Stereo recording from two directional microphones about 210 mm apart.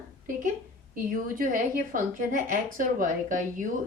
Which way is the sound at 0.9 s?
40° right (ahead or behind).